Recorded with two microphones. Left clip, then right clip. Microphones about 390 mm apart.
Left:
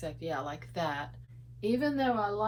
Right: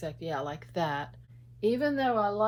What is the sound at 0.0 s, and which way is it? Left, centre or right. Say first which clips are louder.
Speech: right 2 dB; right.